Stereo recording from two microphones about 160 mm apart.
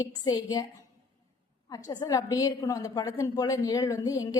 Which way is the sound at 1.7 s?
20° left (ahead or behind).